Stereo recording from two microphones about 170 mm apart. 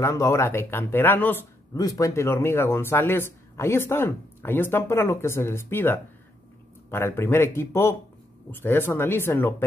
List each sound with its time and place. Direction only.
0.0 s speech: 15° left (ahead or behind)